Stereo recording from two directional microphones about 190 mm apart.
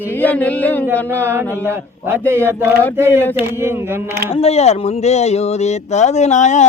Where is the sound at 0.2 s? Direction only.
10° left (ahead or behind).